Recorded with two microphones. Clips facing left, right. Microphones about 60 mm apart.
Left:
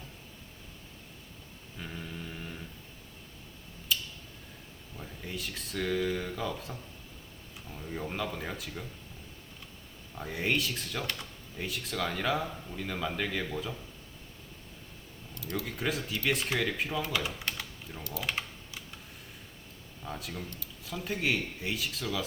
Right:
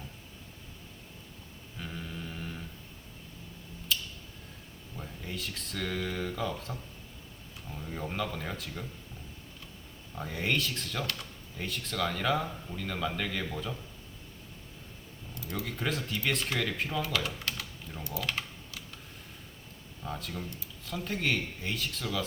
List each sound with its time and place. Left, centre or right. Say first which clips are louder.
1.8 s a sound: right 1 dB; centre
4.9 s speech: even; centre
7.7 s speech: even; centre
10.2 s speech: left 1 dB; centre
15.4 s typing: left 2 dB; centre
15.6 s speech: right 1 dB; centre
17.1 s speech: even; centre
18.2 s typing: left 1 dB; centre
20.1 s speech: right 1 dB; centre